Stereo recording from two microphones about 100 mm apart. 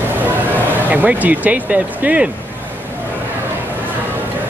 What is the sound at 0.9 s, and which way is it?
Speech, 15° right (ahead or behind).